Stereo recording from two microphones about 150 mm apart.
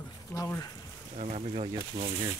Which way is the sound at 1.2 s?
45° right (ahead or behind).